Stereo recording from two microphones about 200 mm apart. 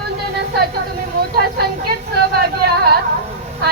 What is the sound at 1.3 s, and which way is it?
Speech, 50° right (ahead or behind).